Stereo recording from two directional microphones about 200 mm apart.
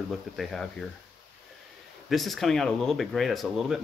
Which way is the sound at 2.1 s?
Centre (ahead or behind).